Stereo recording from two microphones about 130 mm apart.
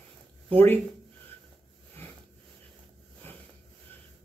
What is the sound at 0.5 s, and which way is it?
Speech, 15° left (ahead or behind).